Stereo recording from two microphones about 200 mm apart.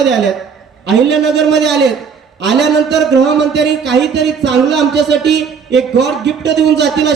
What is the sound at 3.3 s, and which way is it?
Speech, 60° right (ahead or behind).